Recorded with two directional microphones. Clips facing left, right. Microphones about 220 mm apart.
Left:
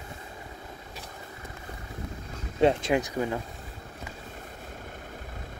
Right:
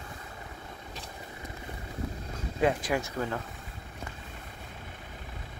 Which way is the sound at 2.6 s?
25° left (ahead or behind).